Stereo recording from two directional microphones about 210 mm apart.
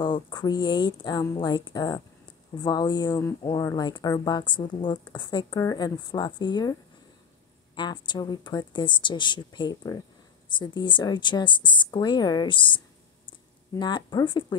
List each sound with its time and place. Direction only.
0.0 s a woman's voice: 20° left (ahead or behind)
7.7 s a woman's voice: 20° left (ahead or behind)